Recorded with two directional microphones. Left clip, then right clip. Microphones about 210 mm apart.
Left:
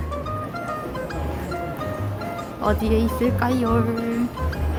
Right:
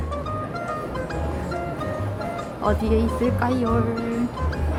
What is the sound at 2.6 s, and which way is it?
A woman's voice, 15° left (ahead or behind).